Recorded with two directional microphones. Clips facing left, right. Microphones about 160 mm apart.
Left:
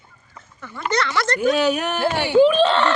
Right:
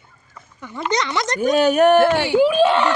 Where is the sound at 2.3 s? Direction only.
10° right (ahead or behind).